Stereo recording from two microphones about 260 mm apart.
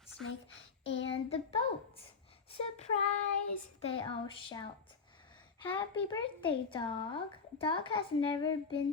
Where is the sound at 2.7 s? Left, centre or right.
Left.